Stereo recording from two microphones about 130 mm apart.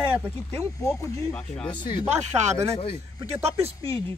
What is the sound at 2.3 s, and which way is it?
Speech, 20° right (ahead or behind).